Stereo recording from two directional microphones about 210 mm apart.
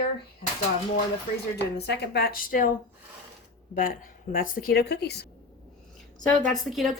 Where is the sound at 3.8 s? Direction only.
40° left (ahead or behind).